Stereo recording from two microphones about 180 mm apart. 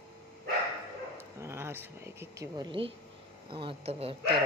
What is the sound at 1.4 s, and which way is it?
Speech, 15° right (ahead or behind).